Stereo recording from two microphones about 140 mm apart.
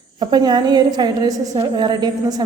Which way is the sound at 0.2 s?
30° right (ahead or behind).